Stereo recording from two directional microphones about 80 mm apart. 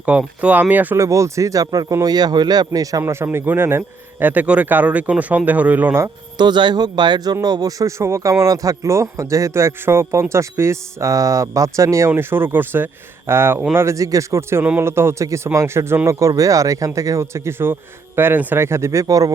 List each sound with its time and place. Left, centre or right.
0.0 s speech: centre
0.9 s speech: right
1.6 s speech: right
3.0 s speech: right
6.3 s a man's voice: right
7.4 s speech: right